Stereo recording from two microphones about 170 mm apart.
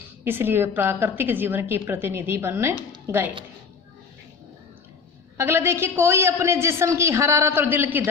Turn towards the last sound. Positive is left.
turn(degrees=-10)  # may be behind; listen again after turning